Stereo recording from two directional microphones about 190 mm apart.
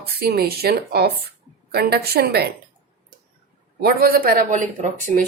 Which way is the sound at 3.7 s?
50° right (ahead or behind).